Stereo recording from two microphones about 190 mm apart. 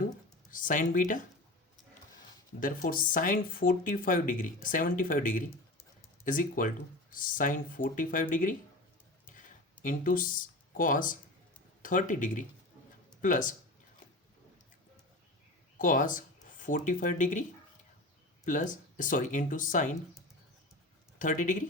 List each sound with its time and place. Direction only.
0.5 s speech: 45° left (ahead or behind)
2.8 s speech: 45° left (ahead or behind)
9.2 s a sound: 45° left (ahead or behind)
11.8 s speech: 45° left (ahead or behind)
15.8 s speech: 45° left (ahead or behind)
18.4 s speech: 40° left (ahead or behind)
21.2 s speech: 40° left (ahead or behind)